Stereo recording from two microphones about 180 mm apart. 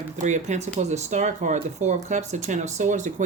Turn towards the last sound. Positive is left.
turn(degrees=-45)  # may be behind; listen again after turning